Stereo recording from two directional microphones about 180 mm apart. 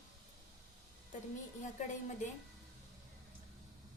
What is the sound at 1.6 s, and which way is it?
Speech, 45° left (ahead or behind).